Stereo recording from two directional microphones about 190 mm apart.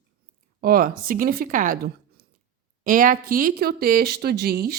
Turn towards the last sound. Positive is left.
turn(degrees=-55)  # may be behind; listen again after turning